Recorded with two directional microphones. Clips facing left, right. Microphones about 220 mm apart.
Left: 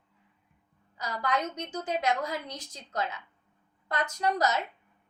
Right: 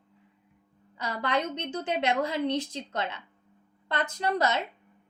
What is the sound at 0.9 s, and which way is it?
A woman's voice, 30° right (ahead or behind).